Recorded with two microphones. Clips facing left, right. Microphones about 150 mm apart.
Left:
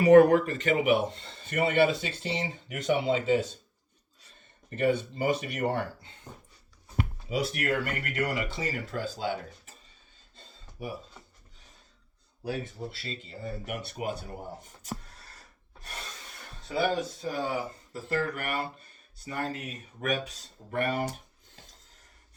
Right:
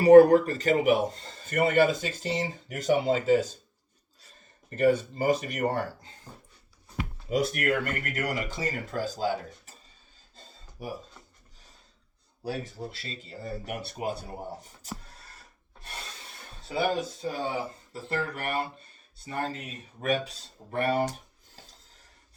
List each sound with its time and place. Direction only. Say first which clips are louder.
0.0 s a man's voice: right 3 dB; 35° right (ahead or behind)
4.7 s a man's voice: right 3 dB; 40° right (ahead or behind)
7.3 s a man's voice: right 4 dB; 45° right (ahead or behind)
10.3 s a sound: even; 40° right (ahead or behind)
12.5 s a man's voice: even; 35° right (ahead or behind)
17.2 s a man's voice: even; 30° right (ahead or behind)